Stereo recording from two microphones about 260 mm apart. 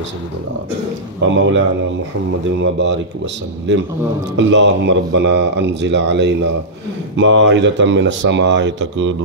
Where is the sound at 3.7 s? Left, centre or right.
Right.